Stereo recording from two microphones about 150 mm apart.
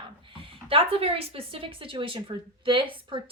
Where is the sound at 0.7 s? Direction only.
40° right (ahead or behind).